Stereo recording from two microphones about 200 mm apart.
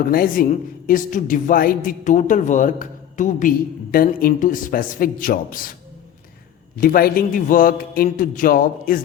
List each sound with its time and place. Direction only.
0.1 s a woman's voice: 45° left (ahead or behind)
6.7 s a man's voice: 45° left (ahead or behind)